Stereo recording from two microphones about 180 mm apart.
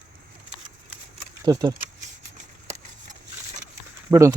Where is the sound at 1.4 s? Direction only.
20° right (ahead or behind).